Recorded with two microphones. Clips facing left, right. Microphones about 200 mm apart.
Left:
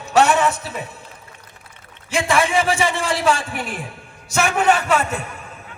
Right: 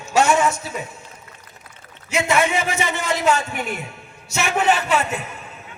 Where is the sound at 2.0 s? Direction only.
30° left (ahead or behind).